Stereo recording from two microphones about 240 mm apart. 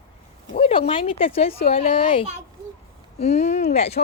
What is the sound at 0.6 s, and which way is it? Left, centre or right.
Speech, left.